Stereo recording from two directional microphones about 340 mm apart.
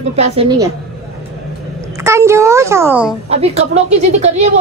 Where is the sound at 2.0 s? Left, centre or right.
Centre.